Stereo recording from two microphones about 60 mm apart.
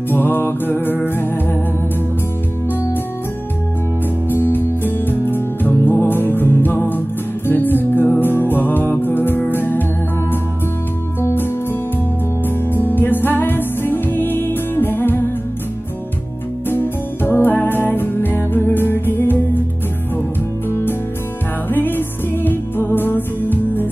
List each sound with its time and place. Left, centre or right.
0.1 s music: left
4.3 s music: left
11.3 s music: left
16.6 s music: left
21.6 s music: left